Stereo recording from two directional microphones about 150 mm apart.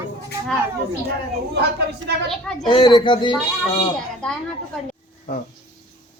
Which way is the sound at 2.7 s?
30° left (ahead or behind).